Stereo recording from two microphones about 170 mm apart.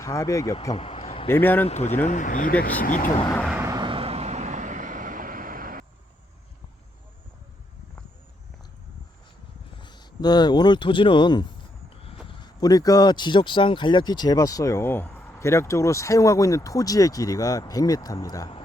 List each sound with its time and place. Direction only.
0.0 s speech: 20° left (ahead or behind)
0.7 s a sound: 35° left (ahead or behind)
1.3 s a man's voice: 10° left (ahead or behind)
1.6 s speech: 40° left (ahead or behind)
3.5 s vehicle: 20° right (ahead or behind); by 5.8 s 55° right (ahead or behind)
9.7 s speech: 25° left (ahead or behind)